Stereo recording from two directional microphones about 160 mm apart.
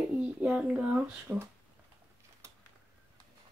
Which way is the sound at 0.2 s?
10° right (ahead or behind).